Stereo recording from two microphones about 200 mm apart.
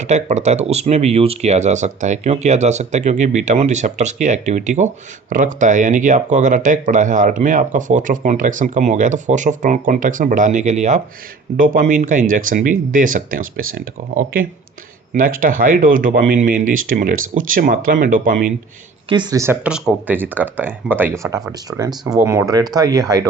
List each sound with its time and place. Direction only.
0.0 s speech: 35° right (ahead or behind)
19.0 s speech: 25° right (ahead or behind)